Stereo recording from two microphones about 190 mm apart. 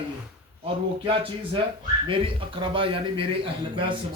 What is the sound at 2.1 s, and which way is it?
A man's voice, 25° right (ahead or behind).